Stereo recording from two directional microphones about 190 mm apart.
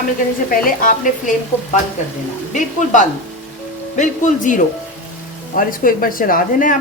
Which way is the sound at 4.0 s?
40° left (ahead or behind).